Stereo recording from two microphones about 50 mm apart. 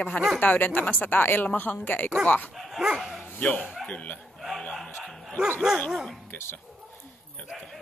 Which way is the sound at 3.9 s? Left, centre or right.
Left.